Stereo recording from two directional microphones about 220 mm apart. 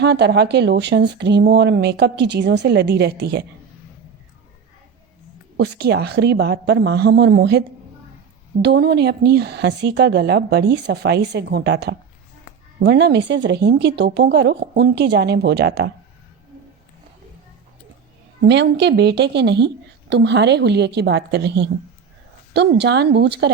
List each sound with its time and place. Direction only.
0.0 s speech: 50° right (ahead or behind)
5.5 s speech: 50° right (ahead or behind)
8.6 s speech: 50° right (ahead or behind)
18.4 s speech: 50° right (ahead or behind)